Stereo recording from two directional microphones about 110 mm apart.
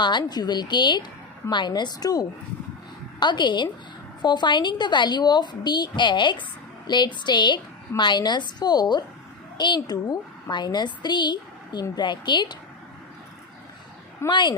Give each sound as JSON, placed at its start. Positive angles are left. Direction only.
{"t": 0.0, "sound": "a woman's voice", "side_deg": 45}
{"t": 14.3, "sound": "a woman's voice", "side_deg": 45}